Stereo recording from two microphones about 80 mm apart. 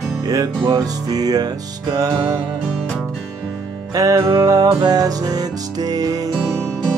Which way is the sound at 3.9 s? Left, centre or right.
Right.